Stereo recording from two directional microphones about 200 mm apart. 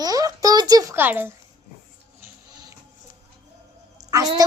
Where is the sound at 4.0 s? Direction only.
15° right (ahead or behind).